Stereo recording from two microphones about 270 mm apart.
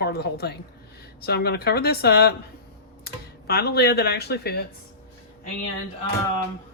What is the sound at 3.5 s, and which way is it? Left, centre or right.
Speech, left.